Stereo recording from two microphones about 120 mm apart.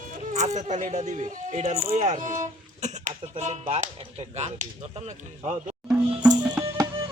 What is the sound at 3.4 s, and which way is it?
Speech, 60° right (ahead or behind).